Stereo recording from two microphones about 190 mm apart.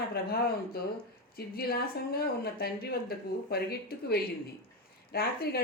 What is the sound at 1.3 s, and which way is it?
Speech, 55° left (ahead or behind).